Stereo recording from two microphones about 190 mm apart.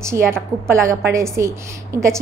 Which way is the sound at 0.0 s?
15° right (ahead or behind).